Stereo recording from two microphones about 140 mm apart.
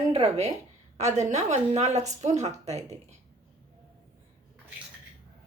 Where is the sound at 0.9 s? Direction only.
55° right (ahead or behind).